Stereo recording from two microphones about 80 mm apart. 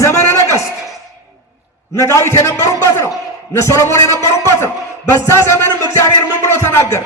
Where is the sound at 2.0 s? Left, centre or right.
Left.